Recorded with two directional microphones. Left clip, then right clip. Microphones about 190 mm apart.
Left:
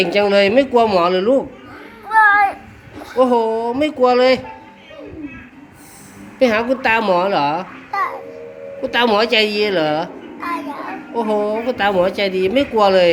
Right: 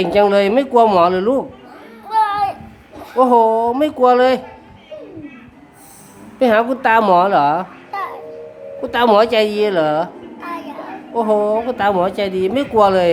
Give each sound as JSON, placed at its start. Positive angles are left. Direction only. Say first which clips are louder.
{"t": 0.0, "sound": "a woman's voice", "louder": "right 1 dB", "side_deg": -20}
{"t": 2.0, "sound": "music", "louder": "left 5 dB", "side_deg": -15}
{"t": 3.2, "sound": "a woman's voice", "louder": "right 3 dB", "side_deg": -25}
{"t": 6.4, "sound": "a child's voice", "louder": "right 2 dB", "side_deg": -25}
{"t": 10.4, "sound": "child singing", "louder": "left 4 dB", "side_deg": -5}
{"t": 11.1, "sound": "a woman's voice", "louder": "right 3 dB", "side_deg": -20}